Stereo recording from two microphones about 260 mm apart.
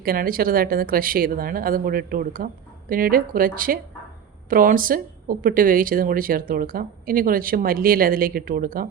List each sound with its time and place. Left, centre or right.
0.0 s speech: right